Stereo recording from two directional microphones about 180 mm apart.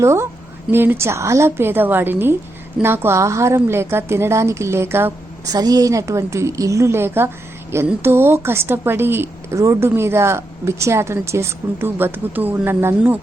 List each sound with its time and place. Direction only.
0.0 s a woman's voice: 15° right (ahead or behind)